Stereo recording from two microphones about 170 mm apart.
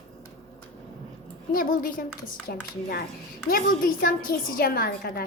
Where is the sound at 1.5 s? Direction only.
60° left (ahead or behind).